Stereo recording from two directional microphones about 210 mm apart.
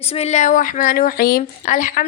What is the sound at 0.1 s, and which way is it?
Speech, 30° left (ahead or behind).